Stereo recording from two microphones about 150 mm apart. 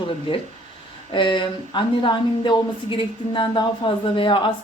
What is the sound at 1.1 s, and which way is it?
A woman's voice, 35° left (ahead or behind).